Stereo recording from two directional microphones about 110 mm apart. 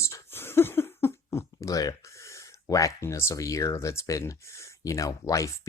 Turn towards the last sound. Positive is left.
turn(degrees=30)  # may be behind; listen again after turning